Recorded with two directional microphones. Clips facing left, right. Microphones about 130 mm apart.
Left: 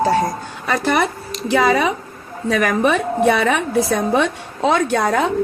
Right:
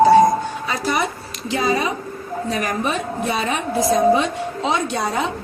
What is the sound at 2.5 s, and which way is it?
A woman's voice, 70° left (ahead or behind).